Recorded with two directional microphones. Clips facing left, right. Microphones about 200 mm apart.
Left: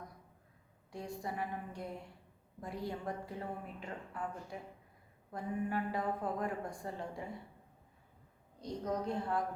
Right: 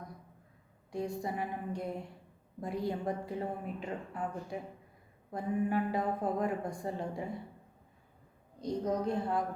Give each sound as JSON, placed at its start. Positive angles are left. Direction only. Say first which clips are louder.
{"t": 0.9, "sound": "a woman's voice", "louder": "right 6 dB", "side_deg": -20}
{"t": 8.6, "sound": "a woman's voice", "louder": "right 5 dB", "side_deg": -15}